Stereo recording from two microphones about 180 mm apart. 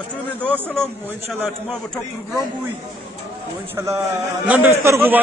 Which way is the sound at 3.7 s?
15° right (ahead or behind).